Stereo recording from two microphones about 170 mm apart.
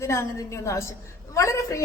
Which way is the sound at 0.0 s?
15° left (ahead or behind).